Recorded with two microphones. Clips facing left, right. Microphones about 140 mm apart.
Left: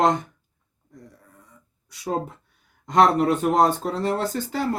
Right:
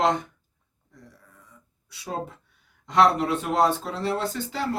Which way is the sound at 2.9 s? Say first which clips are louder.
Left 2 dB; 45° left (ahead or behind).